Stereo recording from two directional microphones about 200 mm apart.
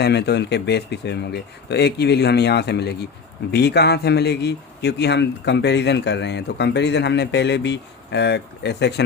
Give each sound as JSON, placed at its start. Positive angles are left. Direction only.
{"t": 0.0, "sound": "speech", "side_deg": 55}